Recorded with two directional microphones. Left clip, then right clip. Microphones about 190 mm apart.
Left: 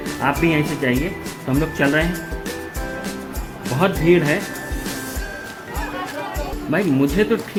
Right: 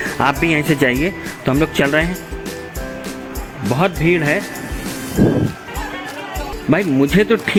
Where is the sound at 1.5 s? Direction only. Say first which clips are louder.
Right 5 dB; 40° right (ahead or behind).